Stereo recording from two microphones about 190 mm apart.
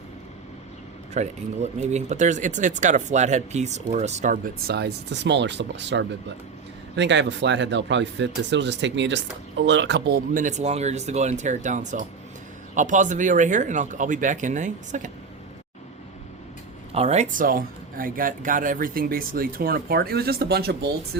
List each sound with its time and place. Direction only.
1.1 s speech: 35° right (ahead or behind)
16.9 s speech: 35° right (ahead or behind); by 21.2 s 55° right (ahead or behind)